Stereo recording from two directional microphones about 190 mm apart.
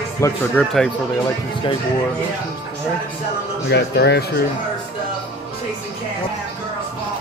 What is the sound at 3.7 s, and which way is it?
Speech, 60° left (ahead or behind).